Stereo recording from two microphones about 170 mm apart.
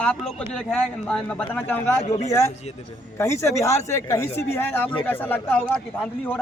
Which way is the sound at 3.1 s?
15° left (ahead or behind).